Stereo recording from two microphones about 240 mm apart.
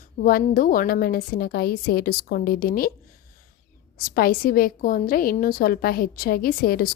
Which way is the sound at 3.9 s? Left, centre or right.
Left.